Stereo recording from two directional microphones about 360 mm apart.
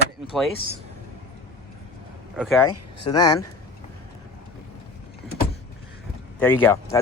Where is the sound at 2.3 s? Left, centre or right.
Centre.